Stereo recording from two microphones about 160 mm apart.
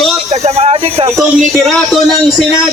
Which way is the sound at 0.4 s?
40° right (ahead or behind).